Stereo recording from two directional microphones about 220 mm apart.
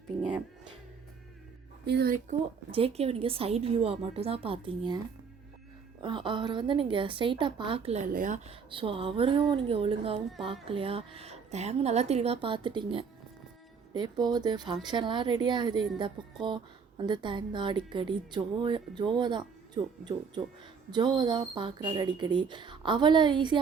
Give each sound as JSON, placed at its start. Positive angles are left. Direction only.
{"t": 1.8, "sound": "speech", "side_deg": -50}
{"t": 2.7, "sound": "a woman's voice", "side_deg": -25}
{"t": 6.0, "sound": "a woman's voice", "side_deg": -20}
{"t": 8.7, "sound": "a woman's voice", "side_deg": -25}